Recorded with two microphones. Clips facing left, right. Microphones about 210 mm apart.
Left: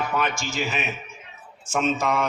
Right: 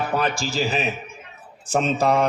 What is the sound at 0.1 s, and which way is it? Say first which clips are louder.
A man's voice: right 3 dB; 35° right (ahead or behind).